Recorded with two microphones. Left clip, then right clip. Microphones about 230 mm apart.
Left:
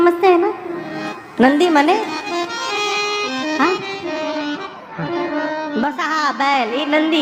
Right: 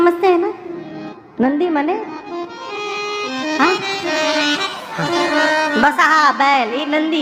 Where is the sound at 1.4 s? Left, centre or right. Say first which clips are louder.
Left 4 dB; left.